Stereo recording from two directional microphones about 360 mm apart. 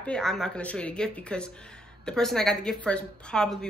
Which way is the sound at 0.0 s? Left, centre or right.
Centre.